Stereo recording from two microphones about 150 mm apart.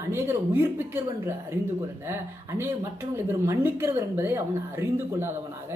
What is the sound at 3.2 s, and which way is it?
A woman's voice, 15° right (ahead or behind).